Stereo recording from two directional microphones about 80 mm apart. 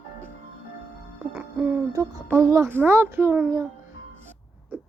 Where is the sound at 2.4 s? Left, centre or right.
Right.